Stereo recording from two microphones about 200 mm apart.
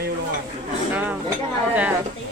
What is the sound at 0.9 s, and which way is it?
Speech, 5° right (ahead or behind).